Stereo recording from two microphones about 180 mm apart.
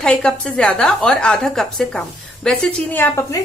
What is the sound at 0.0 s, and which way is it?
A woman's voice, 5° left (ahead or behind).